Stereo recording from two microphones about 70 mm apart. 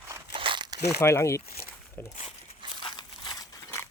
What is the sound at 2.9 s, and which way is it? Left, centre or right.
Crumpling, left.